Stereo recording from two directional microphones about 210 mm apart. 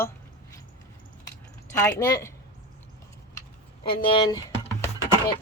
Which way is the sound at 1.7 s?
15° left (ahead or behind).